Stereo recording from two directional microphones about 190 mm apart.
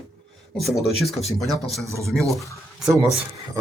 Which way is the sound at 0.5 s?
Centre (ahead or behind).